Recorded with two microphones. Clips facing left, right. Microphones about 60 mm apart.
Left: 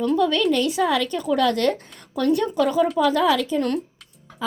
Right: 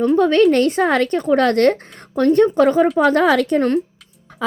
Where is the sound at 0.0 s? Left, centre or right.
Right.